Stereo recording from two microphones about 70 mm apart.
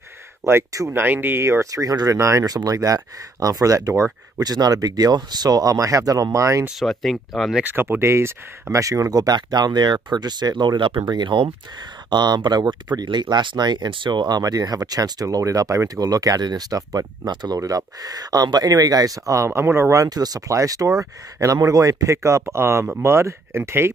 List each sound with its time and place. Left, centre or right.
0.4 s speech: right
0.9 s speech: right
2.1 s speech: right
2.4 s speech: right
4.4 s speech: right
6.8 s speech: centre
7.6 s speech: right
17.3 s speech: right
17.6 s speech: right